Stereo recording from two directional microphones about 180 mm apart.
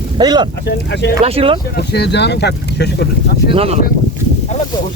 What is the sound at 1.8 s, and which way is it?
Speech, 65° left (ahead or behind).